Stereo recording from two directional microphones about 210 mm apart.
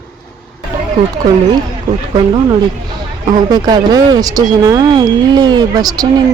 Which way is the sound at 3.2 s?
20° right (ahead or behind).